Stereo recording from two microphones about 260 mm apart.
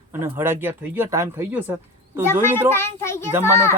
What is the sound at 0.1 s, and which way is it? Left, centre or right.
Speech, centre.